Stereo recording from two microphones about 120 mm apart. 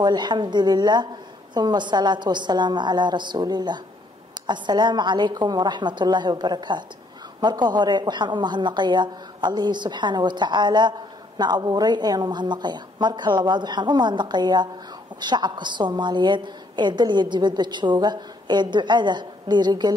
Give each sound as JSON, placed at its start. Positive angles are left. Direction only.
{"t": 0.0, "sound": "a woman's voice", "side_deg": -35}